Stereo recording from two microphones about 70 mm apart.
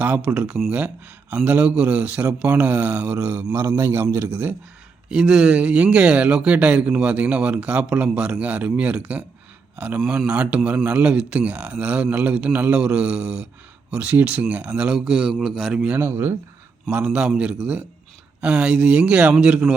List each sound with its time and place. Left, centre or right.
0.0 s a man's voice: right
3.8 s speech: right
4.3 s a man's voice: centre
14.8 s a man's voice: centre
16.0 s speech: right
16.9 s speech: centre